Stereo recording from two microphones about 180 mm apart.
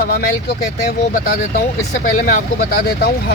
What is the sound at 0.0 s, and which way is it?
Speech, 55° left (ahead or behind).